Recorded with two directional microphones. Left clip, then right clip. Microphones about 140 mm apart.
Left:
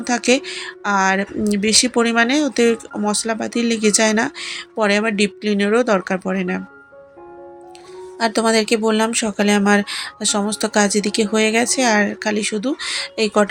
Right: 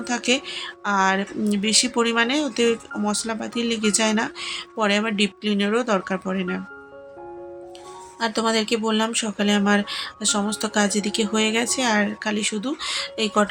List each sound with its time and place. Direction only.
0.0 s speech: 35° left (ahead or behind)
8.2 s speech: 35° left (ahead or behind)